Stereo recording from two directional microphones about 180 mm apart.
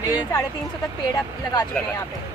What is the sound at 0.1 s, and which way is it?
Speech, 20° left (ahead or behind).